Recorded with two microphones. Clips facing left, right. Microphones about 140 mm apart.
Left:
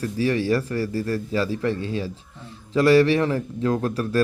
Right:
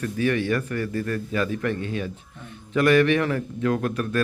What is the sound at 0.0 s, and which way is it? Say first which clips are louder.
A man's voice: left 1 dB; 30° left (ahead or behind).